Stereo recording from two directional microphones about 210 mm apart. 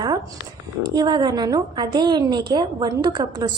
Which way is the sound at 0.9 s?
20° right (ahead or behind).